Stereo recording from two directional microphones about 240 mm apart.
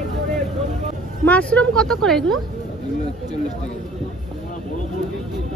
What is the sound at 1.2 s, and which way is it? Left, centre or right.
A woman's voice, centre.